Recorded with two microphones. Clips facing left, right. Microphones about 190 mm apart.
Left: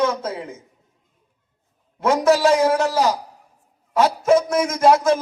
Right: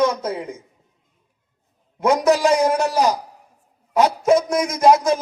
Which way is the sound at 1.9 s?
15° right (ahead or behind).